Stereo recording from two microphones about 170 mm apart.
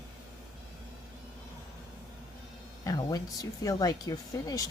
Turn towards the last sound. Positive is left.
turn(degrees=20)  # may be behind; listen again after turning